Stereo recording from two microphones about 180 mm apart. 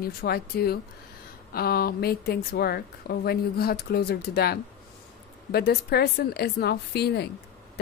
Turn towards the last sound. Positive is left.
turn(degrees=65)  # may be behind; listen again after turning